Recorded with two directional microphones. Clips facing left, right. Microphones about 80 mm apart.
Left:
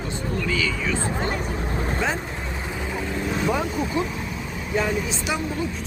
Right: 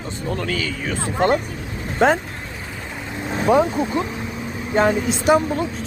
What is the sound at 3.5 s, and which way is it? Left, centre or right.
Speech, right.